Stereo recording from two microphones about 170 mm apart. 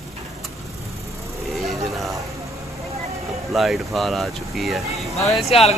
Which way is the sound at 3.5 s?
Centre (ahead or behind).